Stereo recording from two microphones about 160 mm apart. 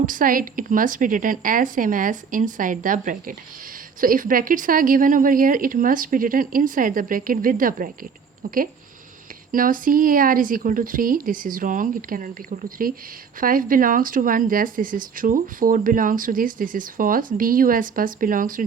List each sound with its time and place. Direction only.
0.0 s speech: 55° right (ahead or behind)
9.5 s speech: 60° right (ahead or behind)